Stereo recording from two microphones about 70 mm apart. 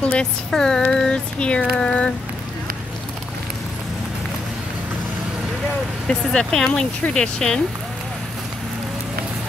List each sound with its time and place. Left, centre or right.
0.0 s speech: centre
6.0 s speech: centre